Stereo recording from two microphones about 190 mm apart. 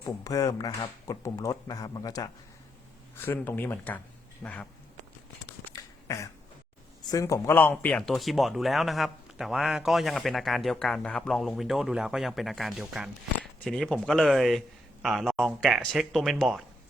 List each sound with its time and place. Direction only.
0.0 s speech: 15° left (ahead or behind)
5.6 s a sound: 15° left (ahead or behind)
7.1 s speech: 15° left (ahead or behind); by 16.6 s centre (ahead or behind)